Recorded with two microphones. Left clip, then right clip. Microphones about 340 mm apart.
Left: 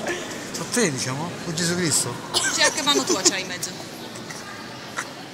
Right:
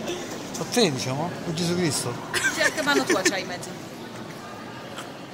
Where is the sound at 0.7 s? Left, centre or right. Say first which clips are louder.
Right 1 dB; centre.